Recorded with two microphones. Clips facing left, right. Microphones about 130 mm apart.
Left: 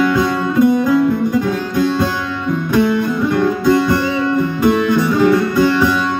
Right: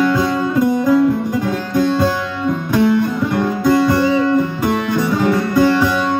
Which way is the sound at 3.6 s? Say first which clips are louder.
Right 4 dB; 40° right (ahead or behind).